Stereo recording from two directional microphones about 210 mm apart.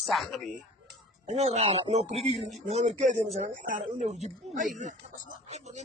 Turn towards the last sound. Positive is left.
turn(degrees=-30)  # may be behind; listen again after turning